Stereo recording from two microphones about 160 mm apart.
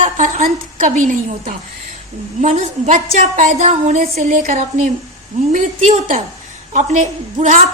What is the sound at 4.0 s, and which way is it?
Speech, 60° right (ahead or behind).